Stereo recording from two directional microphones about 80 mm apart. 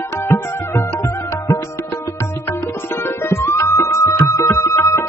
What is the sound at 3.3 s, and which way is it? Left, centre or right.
Music, left.